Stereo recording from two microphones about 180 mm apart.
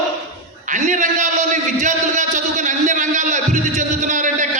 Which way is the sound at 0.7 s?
40° right (ahead or behind).